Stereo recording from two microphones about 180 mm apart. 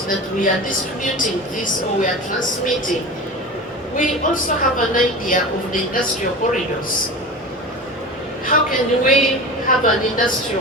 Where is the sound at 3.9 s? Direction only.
45° left (ahead or behind).